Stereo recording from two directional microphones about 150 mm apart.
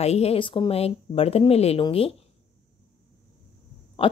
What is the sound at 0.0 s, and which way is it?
Speech, 45° left (ahead or behind).